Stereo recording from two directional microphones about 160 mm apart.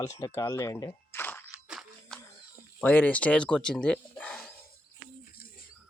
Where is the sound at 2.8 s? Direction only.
10° left (ahead or behind).